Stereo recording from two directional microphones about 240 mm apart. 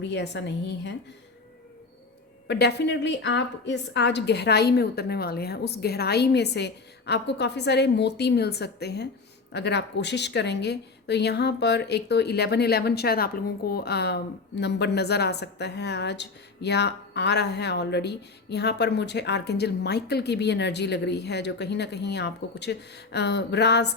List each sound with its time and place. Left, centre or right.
0.0 s a woman's voice: left
2.5 s a woman's voice: left